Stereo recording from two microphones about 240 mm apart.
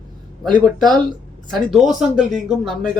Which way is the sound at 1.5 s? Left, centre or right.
Centre.